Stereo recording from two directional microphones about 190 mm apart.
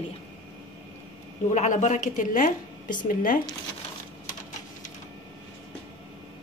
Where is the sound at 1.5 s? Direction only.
40° left (ahead or behind).